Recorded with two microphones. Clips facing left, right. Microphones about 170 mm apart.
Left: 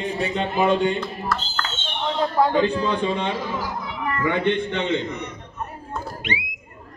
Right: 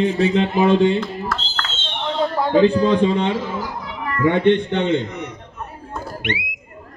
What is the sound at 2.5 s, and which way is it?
A man's voice, 35° right (ahead or behind).